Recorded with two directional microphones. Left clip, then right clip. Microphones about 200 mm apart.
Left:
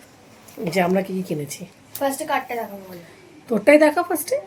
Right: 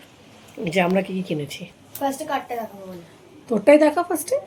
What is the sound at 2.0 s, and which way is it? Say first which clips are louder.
Speech: left 2 dB; 35° left (ahead or behind).